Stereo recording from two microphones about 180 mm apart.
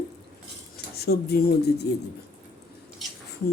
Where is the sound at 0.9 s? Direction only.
60° left (ahead or behind).